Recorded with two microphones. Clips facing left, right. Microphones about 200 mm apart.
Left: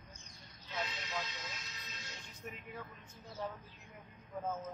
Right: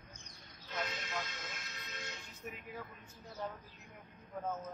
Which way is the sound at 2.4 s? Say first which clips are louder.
Right 1 dB; centre (ahead or behind).